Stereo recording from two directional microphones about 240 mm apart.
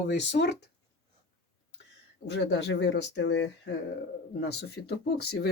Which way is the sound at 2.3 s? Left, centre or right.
Left.